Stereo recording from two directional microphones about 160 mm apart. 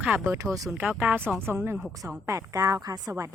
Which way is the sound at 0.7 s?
10° right (ahead or behind).